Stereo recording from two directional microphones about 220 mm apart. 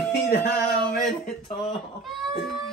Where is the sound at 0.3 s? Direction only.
40° left (ahead or behind).